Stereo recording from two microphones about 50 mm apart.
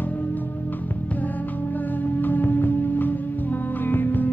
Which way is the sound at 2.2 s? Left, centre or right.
Left.